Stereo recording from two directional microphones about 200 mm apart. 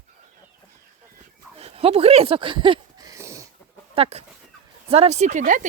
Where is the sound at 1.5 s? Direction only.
30° right (ahead or behind).